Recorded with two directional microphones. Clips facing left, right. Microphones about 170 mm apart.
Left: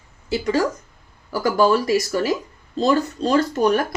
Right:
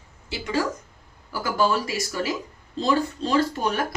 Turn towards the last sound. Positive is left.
turn(degrees=45)  # may be behind; listen again after turning